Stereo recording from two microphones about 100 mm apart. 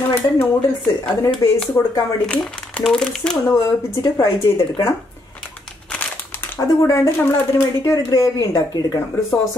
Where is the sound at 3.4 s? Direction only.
30° left (ahead or behind).